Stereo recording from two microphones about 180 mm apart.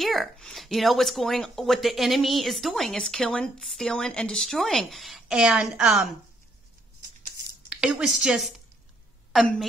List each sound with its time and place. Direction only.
0.0 s speech: centre (ahead or behind)
7.7 s a woman's voice: 5° right (ahead or behind)